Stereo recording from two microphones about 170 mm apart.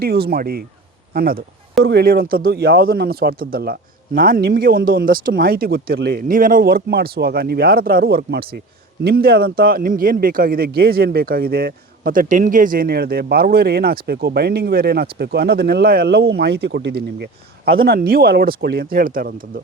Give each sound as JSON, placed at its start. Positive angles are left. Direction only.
{"t": 0.0, "sound": "a man's voice", "side_deg": -65}
{"t": 1.8, "sound": "a man's voice", "side_deg": -75}
{"t": 17.7, "sound": "a man's voice", "side_deg": -60}